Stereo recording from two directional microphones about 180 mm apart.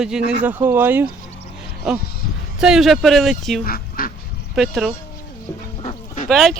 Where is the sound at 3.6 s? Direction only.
55° left (ahead or behind).